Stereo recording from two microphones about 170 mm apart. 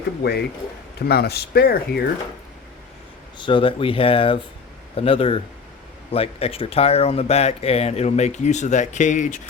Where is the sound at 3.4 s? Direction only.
30° left (ahead or behind).